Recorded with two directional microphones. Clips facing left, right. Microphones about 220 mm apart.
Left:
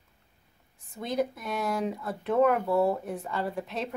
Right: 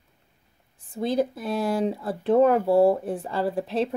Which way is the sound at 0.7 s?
30° right (ahead or behind).